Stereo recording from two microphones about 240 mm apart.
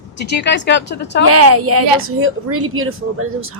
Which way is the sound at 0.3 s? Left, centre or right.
Left.